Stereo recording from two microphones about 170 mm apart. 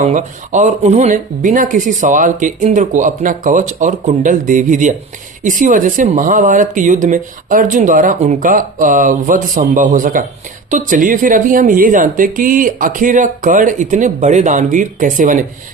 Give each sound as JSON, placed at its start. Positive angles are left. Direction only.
{"t": 0.0, "sound": "speech", "side_deg": -45}